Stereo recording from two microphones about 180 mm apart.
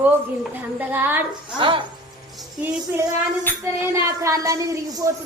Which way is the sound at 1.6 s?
30° right (ahead or behind).